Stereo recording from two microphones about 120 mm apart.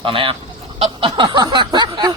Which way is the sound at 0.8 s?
45° right (ahead or behind).